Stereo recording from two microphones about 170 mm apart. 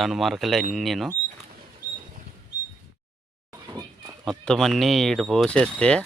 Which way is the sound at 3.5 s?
20° right (ahead or behind).